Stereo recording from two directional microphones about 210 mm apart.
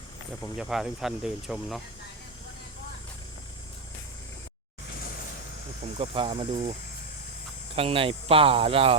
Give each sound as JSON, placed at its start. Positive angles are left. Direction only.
{"t": 0.5, "sound": "speech", "side_deg": 0}
{"t": 6.0, "sound": "speech", "side_deg": -25}
{"t": 7.8, "sound": "speech", "side_deg": -25}